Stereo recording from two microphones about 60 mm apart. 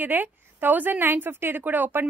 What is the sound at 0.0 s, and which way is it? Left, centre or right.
A woman's voice, right.